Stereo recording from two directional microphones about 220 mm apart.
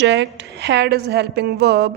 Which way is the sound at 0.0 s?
55° right (ahead or behind).